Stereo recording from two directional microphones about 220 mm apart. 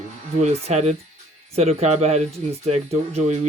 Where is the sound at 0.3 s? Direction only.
30° right (ahead or behind).